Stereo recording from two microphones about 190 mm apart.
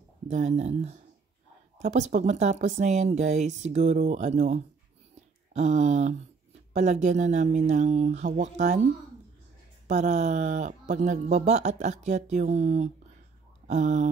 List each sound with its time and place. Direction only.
0.3 s speech: 35° right (ahead or behind)
9.8 s speech: 40° right (ahead or behind)